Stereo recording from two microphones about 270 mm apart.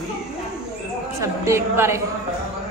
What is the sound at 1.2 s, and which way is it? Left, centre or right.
Speech, centre.